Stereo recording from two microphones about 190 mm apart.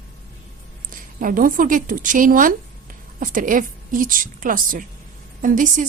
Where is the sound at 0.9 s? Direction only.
45° right (ahead or behind).